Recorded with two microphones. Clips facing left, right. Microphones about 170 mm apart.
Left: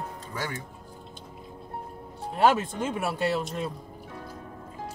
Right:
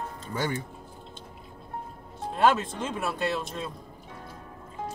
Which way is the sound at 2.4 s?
10° left (ahead or behind).